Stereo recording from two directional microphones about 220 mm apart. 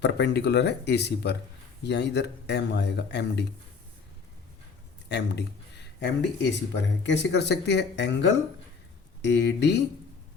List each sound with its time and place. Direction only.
0.0 s speech: 50° left (ahead or behind)
5.0 s speech: 50° left (ahead or behind)